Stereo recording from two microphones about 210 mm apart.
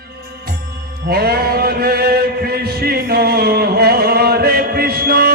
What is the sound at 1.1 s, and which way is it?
Chant, 50° right (ahead or behind).